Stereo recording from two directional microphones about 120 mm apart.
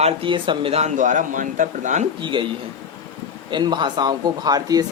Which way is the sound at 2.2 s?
40° right (ahead or behind).